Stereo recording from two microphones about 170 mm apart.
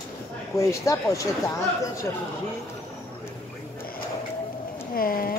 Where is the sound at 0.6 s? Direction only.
20° left (ahead or behind).